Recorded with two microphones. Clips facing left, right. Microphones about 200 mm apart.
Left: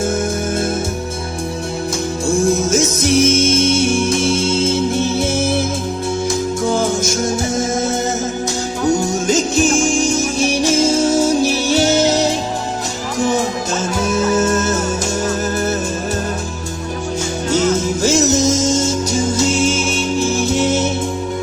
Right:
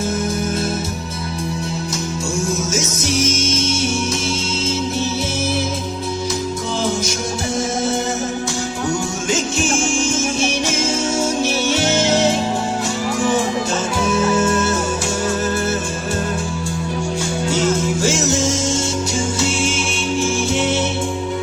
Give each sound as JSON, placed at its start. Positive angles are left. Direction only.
{"t": 2.7, "sound": "music", "side_deg": 55}
{"t": 8.9, "sound": "music", "side_deg": 40}
{"t": 14.3, "sound": "music", "side_deg": 40}
{"t": 18.0, "sound": "music", "side_deg": 40}